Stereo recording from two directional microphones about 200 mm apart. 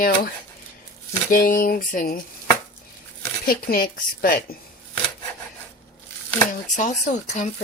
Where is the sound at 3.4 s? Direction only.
45° left (ahead or behind).